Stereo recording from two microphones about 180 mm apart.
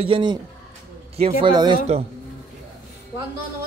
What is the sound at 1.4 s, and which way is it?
Speech, 25° right (ahead or behind).